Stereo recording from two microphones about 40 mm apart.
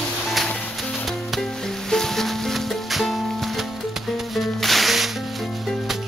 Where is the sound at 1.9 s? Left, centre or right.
Centre.